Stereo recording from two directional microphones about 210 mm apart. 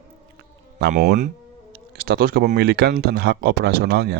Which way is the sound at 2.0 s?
45° right (ahead or behind).